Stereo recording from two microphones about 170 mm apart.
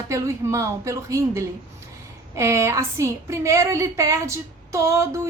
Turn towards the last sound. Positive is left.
turn(degrees=-15)  # may be behind; listen again after turning